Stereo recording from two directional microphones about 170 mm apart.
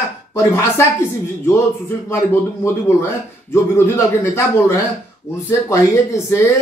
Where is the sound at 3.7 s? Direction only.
15° left (ahead or behind).